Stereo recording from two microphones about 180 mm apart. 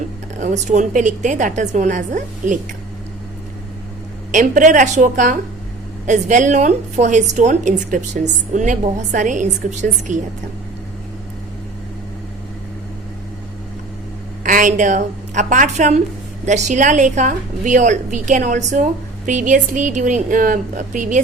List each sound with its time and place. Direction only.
0.3 s a woman's voice: 40° right (ahead or behind)
4.3 s a woman's voice: 45° right (ahead or behind)
14.4 s a woman's voice: 45° right (ahead or behind)